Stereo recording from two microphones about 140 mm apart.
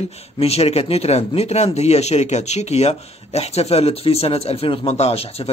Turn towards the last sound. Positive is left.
turn(degrees=45)  # may be behind; listen again after turning